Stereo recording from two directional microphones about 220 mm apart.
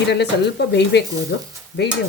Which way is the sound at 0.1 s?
50° left (ahead or behind).